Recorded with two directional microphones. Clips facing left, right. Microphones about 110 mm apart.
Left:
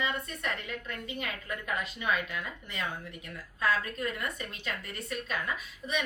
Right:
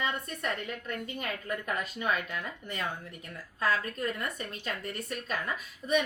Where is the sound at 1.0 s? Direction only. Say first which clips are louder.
Right 2 dB; 45° right (ahead or behind).